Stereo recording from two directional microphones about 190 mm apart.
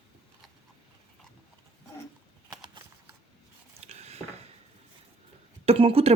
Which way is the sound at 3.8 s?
35° right (ahead or behind).